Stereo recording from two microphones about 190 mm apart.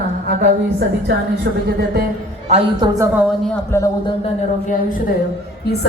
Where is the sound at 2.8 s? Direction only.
15° right (ahead or behind).